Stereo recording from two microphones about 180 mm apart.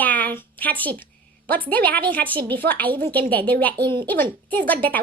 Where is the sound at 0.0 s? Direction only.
10° left (ahead or behind).